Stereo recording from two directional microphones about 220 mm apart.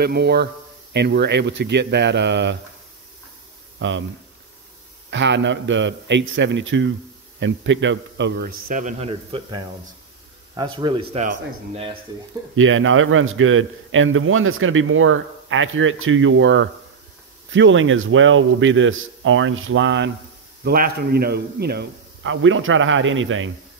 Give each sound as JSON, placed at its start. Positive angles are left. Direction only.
{"t": 0.0, "sound": "a man's voice", "side_deg": -45}
{"t": 5.1, "sound": "a man's voice", "side_deg": -55}
{"t": 12.5, "sound": "a man's voice", "side_deg": -65}
{"t": 20.6, "sound": "a man's voice", "side_deg": -45}